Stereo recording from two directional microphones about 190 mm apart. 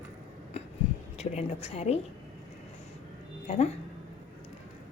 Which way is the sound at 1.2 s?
35° left (ahead or behind).